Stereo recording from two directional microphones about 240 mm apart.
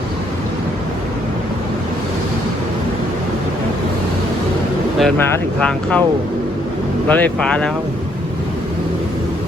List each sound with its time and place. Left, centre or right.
4.9 s speech: centre
7.1 s speech: centre